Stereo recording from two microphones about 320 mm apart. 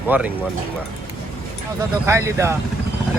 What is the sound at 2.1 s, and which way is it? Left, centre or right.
Speech, centre.